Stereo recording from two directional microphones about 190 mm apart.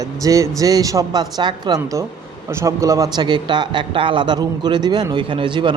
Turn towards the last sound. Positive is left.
turn(degrees=-25)  # may be behind; listen again after turning